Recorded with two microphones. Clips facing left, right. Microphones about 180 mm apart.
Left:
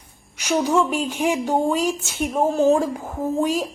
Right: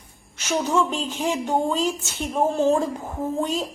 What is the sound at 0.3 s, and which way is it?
A woman's voice, 10° left (ahead or behind).